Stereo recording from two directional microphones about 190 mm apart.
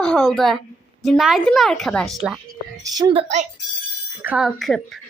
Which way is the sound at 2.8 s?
20° right (ahead or behind).